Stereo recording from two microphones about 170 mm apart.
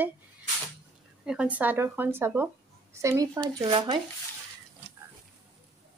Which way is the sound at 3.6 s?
30° right (ahead or behind).